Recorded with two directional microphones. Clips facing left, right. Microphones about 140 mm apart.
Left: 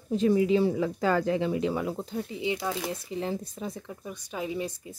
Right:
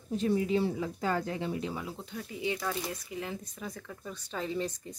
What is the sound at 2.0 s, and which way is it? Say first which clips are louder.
Speech: left 8 dB; 35° left (ahead or behind).